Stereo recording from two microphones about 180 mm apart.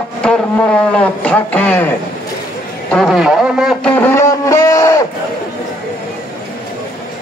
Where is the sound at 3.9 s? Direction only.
15° left (ahead or behind).